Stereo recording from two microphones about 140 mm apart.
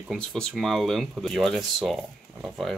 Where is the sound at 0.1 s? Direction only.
Centre (ahead or behind).